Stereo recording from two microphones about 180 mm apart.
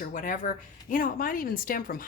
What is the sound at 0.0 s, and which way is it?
Speech, 50° left (ahead or behind).